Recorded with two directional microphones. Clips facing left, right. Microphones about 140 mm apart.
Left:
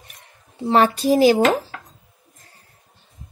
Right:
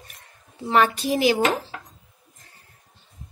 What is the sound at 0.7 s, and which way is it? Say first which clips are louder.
Speech: left 4 dB; 35° left (ahead or behind).